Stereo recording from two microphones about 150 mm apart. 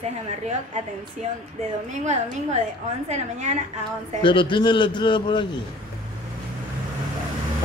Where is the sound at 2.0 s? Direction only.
50° right (ahead or behind).